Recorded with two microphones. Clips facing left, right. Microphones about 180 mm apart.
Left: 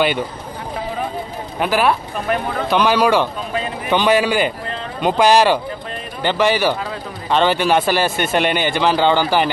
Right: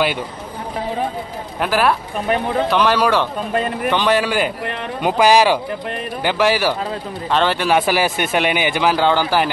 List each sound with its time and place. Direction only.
1.6 s a man's voice: centre (ahead or behind)
3.5 s speech: 55° right (ahead or behind)
3.9 s a man's voice: 5° left (ahead or behind)
4.6 s a sound: 65° right (ahead or behind)
5.0 s a man's voice: 5° right (ahead or behind)